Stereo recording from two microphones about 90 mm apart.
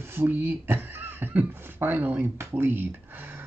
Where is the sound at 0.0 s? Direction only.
25° right (ahead or behind).